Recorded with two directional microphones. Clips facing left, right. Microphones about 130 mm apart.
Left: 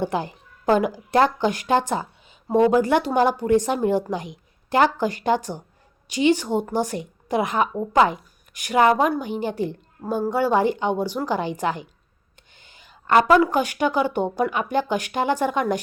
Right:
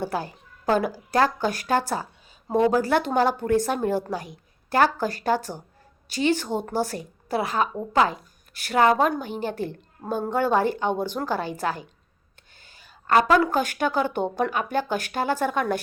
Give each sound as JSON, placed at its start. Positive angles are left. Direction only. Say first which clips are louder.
{"t": 0.0, "sound": "a woman's voice", "louder": "left 3 dB", "side_deg": 20}
{"t": 12.5, "sound": "a sound", "louder": "left 1 dB", "side_deg": 15}
{"t": 13.3, "sound": "a woman's voice", "louder": "left 3 dB", "side_deg": 10}